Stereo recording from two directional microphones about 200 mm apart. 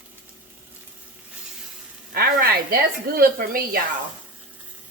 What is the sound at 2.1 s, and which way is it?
A woman's voice, 50° right (ahead or behind).